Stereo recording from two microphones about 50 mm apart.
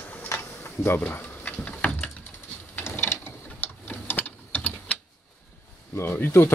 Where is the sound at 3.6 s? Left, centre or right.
Left.